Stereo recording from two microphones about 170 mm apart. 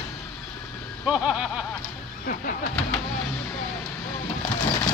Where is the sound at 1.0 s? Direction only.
5° right (ahead or behind).